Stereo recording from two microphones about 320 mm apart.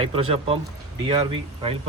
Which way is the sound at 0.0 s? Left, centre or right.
Centre.